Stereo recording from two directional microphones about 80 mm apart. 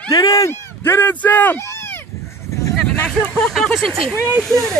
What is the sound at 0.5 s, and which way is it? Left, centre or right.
Speech, left.